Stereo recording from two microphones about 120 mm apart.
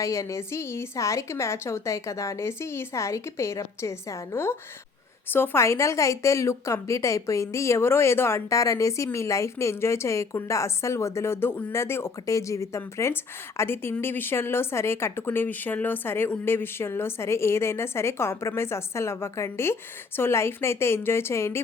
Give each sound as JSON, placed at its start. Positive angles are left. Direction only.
{"t": 0.0, "sound": "speech", "side_deg": 25}